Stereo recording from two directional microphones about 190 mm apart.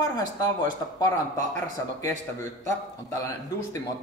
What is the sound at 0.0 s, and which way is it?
Speech, 20° left (ahead or behind).